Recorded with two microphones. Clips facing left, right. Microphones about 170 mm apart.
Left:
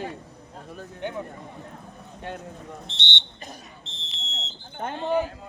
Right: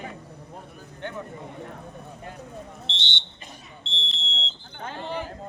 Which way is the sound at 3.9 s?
30° right (ahead or behind).